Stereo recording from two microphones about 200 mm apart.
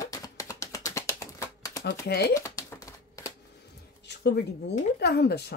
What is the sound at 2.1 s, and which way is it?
Speech, 55° left (ahead or behind).